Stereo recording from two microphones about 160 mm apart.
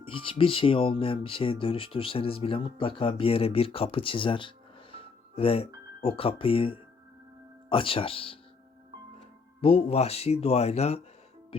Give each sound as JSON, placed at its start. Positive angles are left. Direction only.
{"t": 0.0, "sound": "speech", "side_deg": 35}